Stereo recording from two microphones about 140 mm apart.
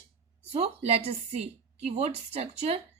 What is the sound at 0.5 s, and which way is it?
A woman's voice, 50° right (ahead or behind).